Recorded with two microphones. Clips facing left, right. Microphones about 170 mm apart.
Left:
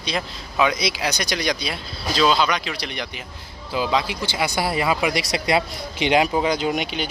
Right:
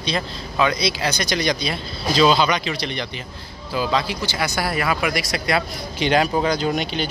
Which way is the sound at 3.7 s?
20° left (ahead or behind).